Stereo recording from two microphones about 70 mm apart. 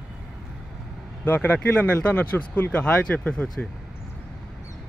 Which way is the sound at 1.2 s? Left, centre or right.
Left.